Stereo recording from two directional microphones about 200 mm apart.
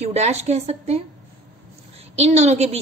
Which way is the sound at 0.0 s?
35° right (ahead or behind).